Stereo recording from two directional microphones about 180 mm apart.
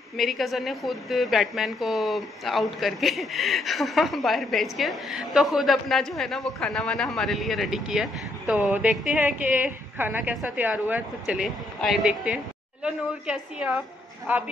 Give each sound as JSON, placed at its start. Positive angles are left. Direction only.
{"t": 0.2, "sound": "a woman's voice", "side_deg": 0}